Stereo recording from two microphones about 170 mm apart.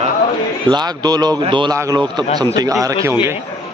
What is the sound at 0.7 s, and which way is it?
A man's voice, 25° right (ahead or behind).